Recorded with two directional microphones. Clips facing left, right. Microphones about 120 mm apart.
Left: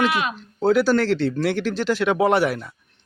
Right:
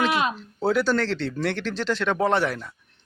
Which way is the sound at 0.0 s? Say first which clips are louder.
Left 1 dB; 30° right (ahead or behind).